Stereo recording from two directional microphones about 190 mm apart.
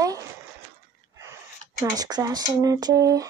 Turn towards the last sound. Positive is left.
turn(degrees=-20)  # may be behind; listen again after turning